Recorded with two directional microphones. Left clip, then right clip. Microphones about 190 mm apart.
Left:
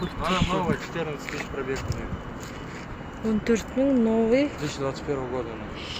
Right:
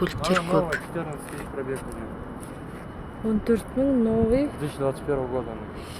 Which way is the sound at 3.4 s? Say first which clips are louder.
Even; 5° right (ahead or behind).